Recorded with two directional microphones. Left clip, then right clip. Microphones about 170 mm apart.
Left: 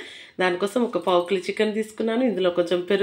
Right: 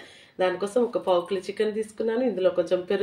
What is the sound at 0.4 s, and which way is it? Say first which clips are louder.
Speech: left 1 dB; 50° left (ahead or behind).